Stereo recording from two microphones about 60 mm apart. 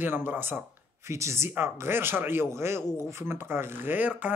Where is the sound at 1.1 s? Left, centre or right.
Right.